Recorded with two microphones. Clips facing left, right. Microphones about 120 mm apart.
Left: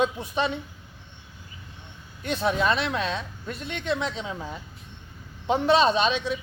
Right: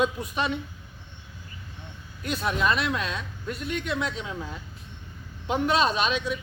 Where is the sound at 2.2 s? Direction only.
30° left (ahead or behind).